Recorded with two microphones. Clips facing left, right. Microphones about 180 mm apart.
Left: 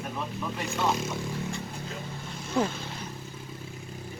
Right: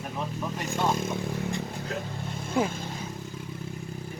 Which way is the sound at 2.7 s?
45° right (ahead or behind).